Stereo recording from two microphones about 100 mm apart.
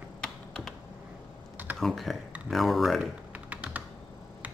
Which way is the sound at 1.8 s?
Centre (ahead or behind).